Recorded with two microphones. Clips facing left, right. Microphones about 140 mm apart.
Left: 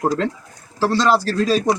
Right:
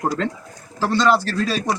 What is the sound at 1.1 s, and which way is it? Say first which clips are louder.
Speech: left 2 dB; 40° left (ahead or behind).